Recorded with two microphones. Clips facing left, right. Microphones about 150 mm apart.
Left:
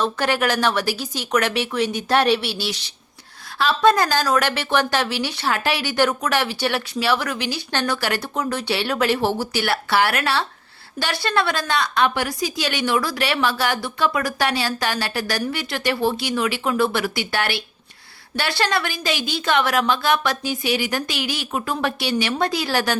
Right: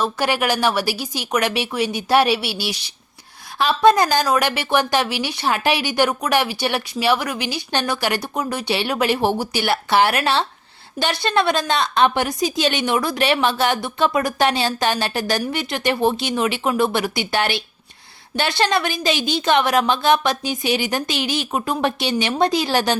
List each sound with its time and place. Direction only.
0.0 s a woman's voice: 10° right (ahead or behind)